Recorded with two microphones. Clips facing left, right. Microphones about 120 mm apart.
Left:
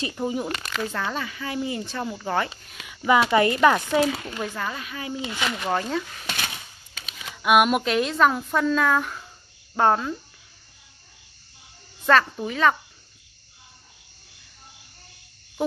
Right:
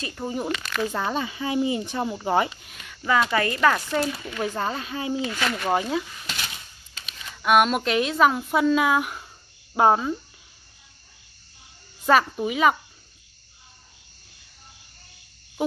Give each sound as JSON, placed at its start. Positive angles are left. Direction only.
{"t": 0.0, "sound": "speech", "side_deg": 15}
{"t": 0.8, "sound": "speech", "side_deg": -20}
{"t": 2.9, "sound": "speech", "side_deg": 10}
{"t": 4.0, "sound": "speech", "side_deg": 70}
{"t": 4.6, "sound": "speech", "side_deg": -30}
{"t": 5.2, "sound": "speech", "side_deg": 15}
{"t": 5.7, "sound": "a woman's voice", "side_deg": -10}
{"t": 6.2, "sound": "a sound", "side_deg": 75}
{"t": 7.4, "sound": "a woman's voice", "side_deg": 5}
{"t": 12.1, "sound": "a woman's voice", "side_deg": -10}